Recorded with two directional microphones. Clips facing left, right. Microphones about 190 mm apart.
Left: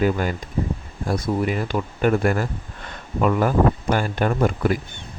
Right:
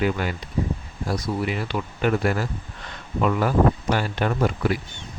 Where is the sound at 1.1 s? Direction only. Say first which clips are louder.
Left 3 dB; 50° left (ahead or behind).